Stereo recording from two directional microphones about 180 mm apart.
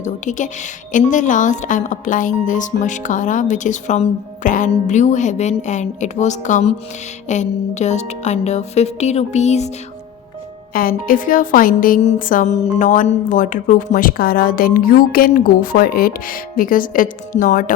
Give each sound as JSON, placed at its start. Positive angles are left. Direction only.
{"t": 0.0, "sound": "a woman's voice", "side_deg": 45}
{"t": 7.3, "sound": "music", "side_deg": 40}
{"t": 10.8, "sound": "a woman's voice", "side_deg": 50}